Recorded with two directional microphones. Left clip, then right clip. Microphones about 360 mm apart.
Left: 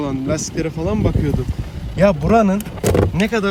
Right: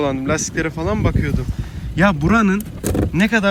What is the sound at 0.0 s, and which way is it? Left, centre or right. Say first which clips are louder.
Speech: right 2 dB; centre.